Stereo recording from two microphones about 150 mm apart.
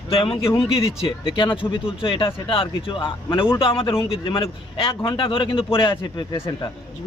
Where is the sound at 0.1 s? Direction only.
35° left (ahead or behind).